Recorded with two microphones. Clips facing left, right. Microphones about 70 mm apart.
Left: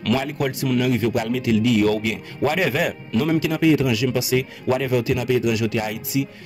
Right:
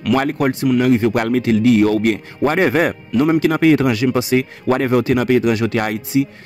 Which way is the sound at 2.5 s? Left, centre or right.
Right.